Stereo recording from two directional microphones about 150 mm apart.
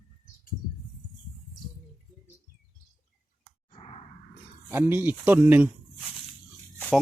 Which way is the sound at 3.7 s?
35° left (ahead or behind).